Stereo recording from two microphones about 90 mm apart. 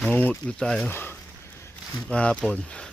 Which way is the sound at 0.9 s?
25° left (ahead or behind).